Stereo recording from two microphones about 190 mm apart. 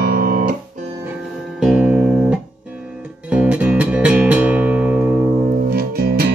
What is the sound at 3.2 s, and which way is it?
Music, 5° right (ahead or behind).